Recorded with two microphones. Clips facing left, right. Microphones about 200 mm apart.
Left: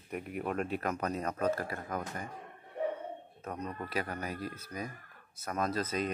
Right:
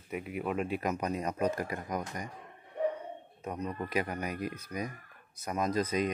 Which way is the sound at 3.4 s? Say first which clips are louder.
Right 3 dB; 10° right (ahead or behind).